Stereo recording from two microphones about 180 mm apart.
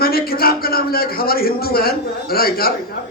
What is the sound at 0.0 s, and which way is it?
Speech, 55° left (ahead or behind).